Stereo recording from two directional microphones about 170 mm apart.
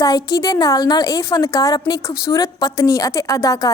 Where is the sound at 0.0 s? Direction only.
20° left (ahead or behind).